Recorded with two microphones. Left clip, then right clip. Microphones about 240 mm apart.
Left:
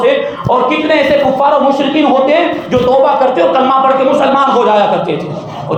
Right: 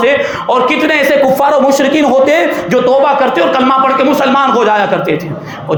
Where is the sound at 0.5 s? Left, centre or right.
Right.